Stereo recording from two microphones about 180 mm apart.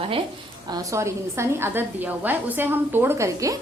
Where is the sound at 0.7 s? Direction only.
20° right (ahead or behind).